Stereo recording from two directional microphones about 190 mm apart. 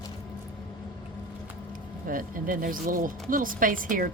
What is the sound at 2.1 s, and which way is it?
Speech, 45° right (ahead or behind).